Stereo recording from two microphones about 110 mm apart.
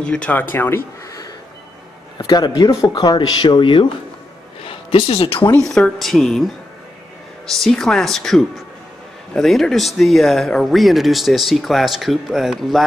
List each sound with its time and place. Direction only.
0.0 s speech: 10° left (ahead or behind)
2.1 s speech: 40° left (ahead or behind)
4.6 s speech: 60° left (ahead or behind)
5.6 s speech: 5° left (ahead or behind)
7.5 s speech: 5° left (ahead or behind)